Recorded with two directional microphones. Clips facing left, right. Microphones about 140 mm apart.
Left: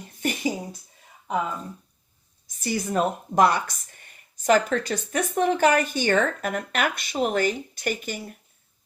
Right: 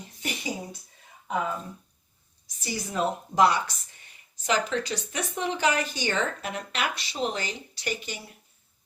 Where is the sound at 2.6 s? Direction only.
55° left (ahead or behind).